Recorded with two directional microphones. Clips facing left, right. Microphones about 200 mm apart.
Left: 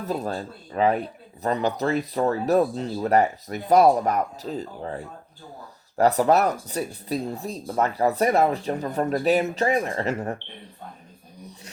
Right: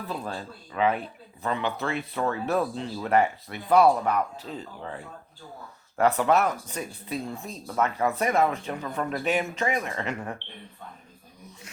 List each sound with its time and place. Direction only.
0.0 s speech: 40° left (ahead or behind)